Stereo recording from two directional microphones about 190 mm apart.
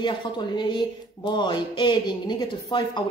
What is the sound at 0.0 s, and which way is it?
Speech, 25° left (ahead or behind).